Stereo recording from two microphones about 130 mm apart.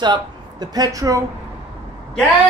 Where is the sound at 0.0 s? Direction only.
35° right (ahead or behind).